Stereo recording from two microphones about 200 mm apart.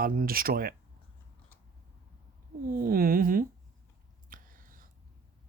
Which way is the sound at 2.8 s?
45° right (ahead or behind).